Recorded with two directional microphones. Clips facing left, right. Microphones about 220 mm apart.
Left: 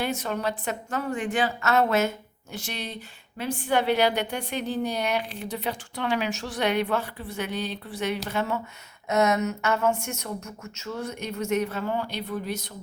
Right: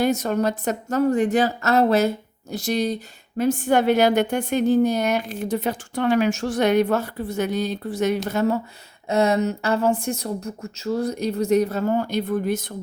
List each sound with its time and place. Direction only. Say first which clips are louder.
0.0 s a woman's voice: right 7 dB; 45° right (ahead or behind)